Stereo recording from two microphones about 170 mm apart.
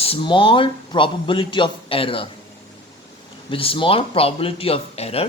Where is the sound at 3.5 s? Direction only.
30° left (ahead or behind).